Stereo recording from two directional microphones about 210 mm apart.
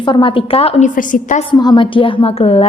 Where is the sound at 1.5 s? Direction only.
20° left (ahead or behind).